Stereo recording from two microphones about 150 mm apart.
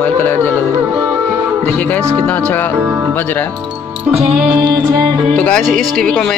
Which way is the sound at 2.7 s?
15° right (ahead or behind).